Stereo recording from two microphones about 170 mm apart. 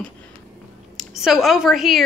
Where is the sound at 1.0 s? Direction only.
Centre (ahead or behind).